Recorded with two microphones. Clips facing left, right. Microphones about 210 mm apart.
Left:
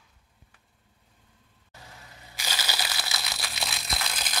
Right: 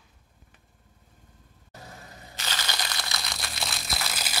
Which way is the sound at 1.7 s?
45° right (ahead or behind).